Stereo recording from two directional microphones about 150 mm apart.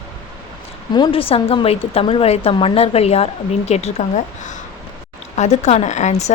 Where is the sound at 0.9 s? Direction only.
35° left (ahead or behind).